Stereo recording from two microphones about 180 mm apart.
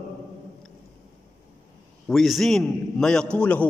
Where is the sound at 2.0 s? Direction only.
Centre (ahead or behind).